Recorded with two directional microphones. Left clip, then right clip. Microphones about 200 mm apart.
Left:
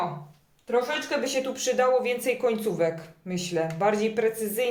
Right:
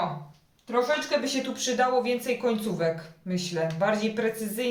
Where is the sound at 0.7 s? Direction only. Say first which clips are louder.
Right 1 dB; 35° left (ahead or behind).